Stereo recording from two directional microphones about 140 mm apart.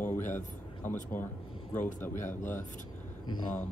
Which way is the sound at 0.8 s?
10° left (ahead or behind).